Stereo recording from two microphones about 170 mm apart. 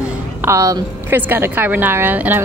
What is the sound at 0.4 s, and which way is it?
A woman's voice, 15° right (ahead or behind).